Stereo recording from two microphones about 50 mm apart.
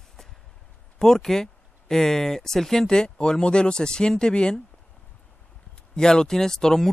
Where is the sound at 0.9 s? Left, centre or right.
Centre.